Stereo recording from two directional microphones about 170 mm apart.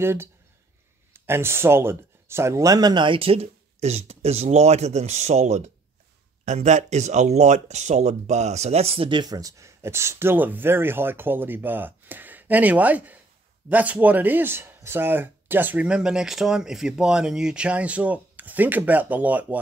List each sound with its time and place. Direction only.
0.0 s speech: 15° right (ahead or behind)